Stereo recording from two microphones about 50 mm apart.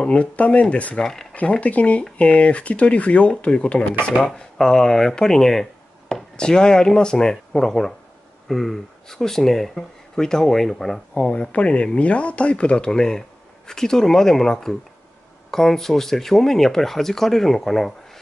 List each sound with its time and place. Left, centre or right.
0.0 s speech: left
0.9 s speech: centre
1.3 s speech: left
4.3 s speech: centre
11.2 s speech: left; by 17.9 s centre